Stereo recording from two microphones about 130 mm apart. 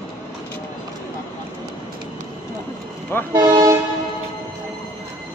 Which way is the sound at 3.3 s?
30° right (ahead or behind).